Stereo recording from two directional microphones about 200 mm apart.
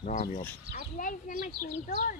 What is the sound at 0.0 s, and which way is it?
A child's voice, 40° left (ahead or behind).